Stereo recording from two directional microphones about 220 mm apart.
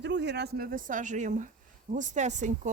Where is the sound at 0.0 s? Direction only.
50° right (ahead or behind).